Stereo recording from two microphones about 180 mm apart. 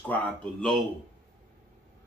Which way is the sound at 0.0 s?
5° left (ahead or behind).